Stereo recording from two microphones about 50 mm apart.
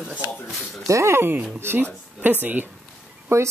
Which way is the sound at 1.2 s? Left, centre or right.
Right.